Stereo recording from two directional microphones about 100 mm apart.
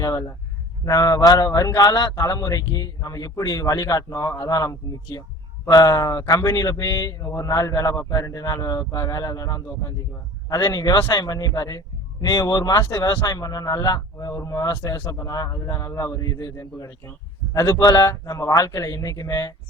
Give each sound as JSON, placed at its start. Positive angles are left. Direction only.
{"t": 0.0, "sound": "a man's voice", "side_deg": 30}